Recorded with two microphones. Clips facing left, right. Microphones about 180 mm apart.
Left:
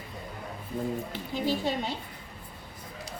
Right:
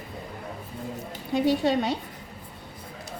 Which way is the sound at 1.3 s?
70° right (ahead or behind).